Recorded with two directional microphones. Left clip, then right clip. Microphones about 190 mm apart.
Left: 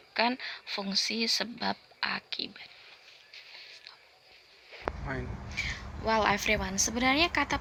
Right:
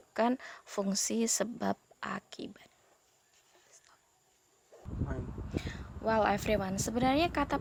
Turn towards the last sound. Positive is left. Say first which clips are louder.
# left 3 dB
turn(degrees=-50)  # may be behind; listen again after turning